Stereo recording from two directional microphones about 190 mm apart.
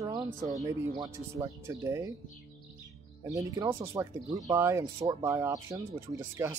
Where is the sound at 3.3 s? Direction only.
15° right (ahead or behind).